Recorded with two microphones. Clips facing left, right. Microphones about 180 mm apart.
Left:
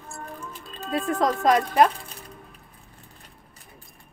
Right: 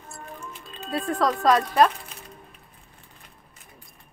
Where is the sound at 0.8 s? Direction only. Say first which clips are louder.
Left 1 dB; 20° left (ahead or behind).